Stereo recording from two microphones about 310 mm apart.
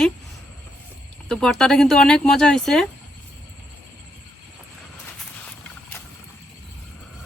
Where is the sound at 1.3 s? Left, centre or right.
Centre.